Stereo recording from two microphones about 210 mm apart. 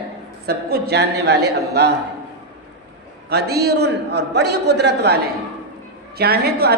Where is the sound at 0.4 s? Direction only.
50° right (ahead or behind).